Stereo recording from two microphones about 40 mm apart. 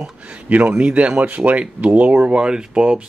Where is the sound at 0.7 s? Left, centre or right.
Right.